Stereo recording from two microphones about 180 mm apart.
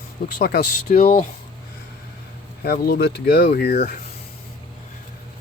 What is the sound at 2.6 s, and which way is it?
Speech, 55° left (ahead or behind).